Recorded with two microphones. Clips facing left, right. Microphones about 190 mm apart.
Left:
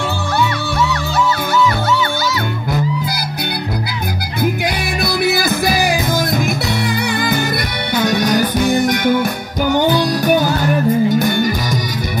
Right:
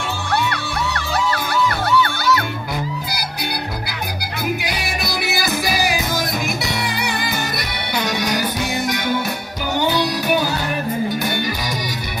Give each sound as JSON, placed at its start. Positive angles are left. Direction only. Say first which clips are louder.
{"t": 1.5, "sound": "music", "louder": "left 3 dB", "side_deg": -60}
{"t": 4.6, "sound": "music", "louder": "left 6 dB", "side_deg": 55}
{"t": 8.0, "sound": "music", "louder": "left 7 dB", "side_deg": 50}